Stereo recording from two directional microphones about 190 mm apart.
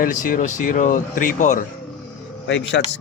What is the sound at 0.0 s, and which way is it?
Speech, 45° left (ahead or behind).